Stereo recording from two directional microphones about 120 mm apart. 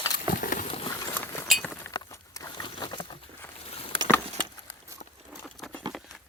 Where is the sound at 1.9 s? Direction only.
30° left (ahead or behind).